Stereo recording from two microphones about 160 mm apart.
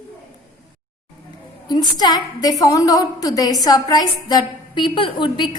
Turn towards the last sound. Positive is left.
turn(degrees=30)  # may be behind; listen again after turning